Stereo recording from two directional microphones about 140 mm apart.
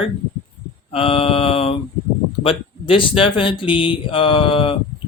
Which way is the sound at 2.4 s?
40° left (ahead or behind).